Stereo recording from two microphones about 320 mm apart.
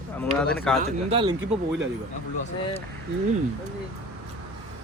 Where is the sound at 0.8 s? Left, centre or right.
Centre.